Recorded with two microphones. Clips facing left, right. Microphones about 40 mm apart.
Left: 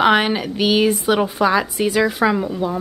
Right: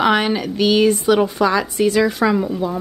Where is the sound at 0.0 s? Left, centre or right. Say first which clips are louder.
Left 1 dB; centre.